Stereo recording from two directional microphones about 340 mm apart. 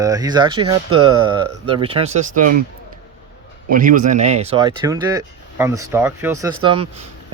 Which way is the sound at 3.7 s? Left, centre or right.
Right.